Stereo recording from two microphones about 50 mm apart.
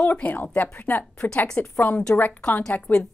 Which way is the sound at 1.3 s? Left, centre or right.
Left.